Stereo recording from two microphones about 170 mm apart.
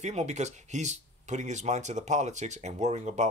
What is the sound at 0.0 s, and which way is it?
Speech, 40° right (ahead or behind).